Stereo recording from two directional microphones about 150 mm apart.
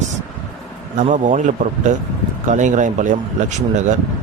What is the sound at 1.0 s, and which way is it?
Speech, 55° right (ahead or behind).